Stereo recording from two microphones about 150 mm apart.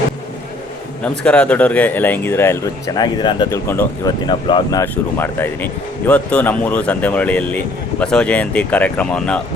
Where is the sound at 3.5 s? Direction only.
15° left (ahead or behind).